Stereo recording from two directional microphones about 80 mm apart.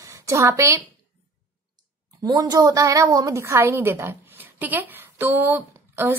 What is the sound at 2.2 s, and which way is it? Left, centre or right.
A woman's voice, right.